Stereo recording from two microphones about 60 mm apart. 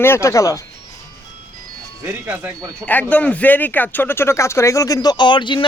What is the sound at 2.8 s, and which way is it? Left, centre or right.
Speech, left.